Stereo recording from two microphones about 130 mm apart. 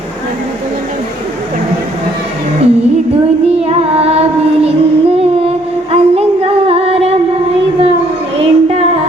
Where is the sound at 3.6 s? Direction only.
50° right (ahead or behind).